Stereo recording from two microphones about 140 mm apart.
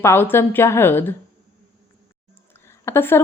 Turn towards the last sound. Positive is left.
turn(degrees=15)  # may be behind; listen again after turning